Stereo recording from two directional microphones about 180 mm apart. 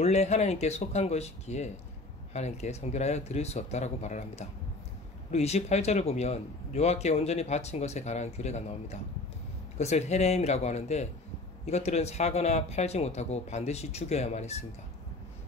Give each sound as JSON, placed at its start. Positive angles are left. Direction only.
{"t": 0.0, "sound": "speech", "side_deg": 35}